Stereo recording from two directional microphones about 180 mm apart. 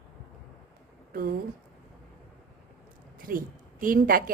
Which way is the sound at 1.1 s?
55° right (ahead or behind).